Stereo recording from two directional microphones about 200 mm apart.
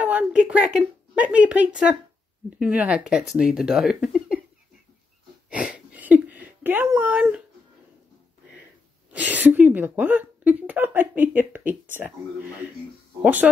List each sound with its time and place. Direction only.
0.0 s a sound: 5° right (ahead or behind)
0.7 s a woman's voice: 5° right (ahead or behind)
5.5 s speech: 5° right (ahead or behind)
9.1 s a woman's voice: 10° right (ahead or behind)
13.2 s a woman's voice: 10° right (ahead or behind)